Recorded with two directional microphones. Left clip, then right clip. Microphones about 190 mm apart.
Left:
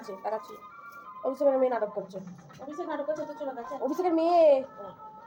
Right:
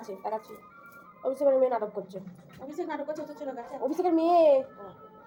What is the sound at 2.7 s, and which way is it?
Speech, 35° right (ahead or behind).